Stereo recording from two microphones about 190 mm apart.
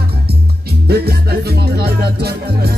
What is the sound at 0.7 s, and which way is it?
Music, 55° right (ahead or behind).